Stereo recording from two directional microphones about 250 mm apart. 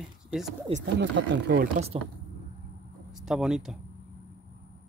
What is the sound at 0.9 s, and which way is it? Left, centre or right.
Speech, right.